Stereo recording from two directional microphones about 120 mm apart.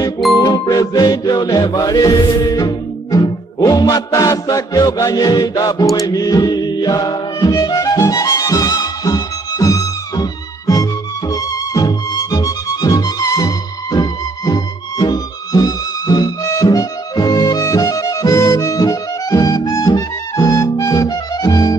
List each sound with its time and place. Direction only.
0.4 s music: 35° left (ahead or behind)